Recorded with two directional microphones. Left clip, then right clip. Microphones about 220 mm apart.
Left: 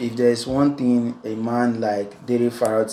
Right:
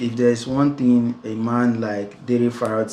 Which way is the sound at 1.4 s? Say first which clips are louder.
Even; 5° right (ahead or behind).